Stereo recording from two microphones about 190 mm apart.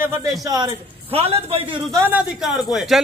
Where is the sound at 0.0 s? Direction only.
15° right (ahead or behind).